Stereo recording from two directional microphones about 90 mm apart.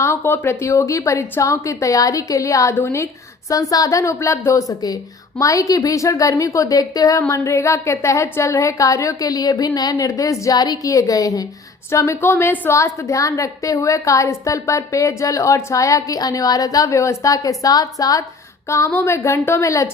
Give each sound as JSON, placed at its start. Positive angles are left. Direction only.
{"t": 0.0, "sound": "a woman's voice", "side_deg": 30}
{"t": 3.5, "sound": "a woman's voice", "side_deg": 40}
{"t": 11.9, "sound": "a woman's voice", "side_deg": 30}
{"t": 18.7, "sound": "a woman's voice", "side_deg": 30}